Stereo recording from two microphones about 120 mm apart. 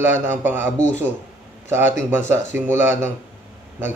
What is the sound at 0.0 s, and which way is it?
Speech, 15° right (ahead or behind).